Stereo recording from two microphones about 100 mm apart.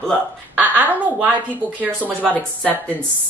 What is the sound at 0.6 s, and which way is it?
A woman's voice, 15° right (ahead or behind).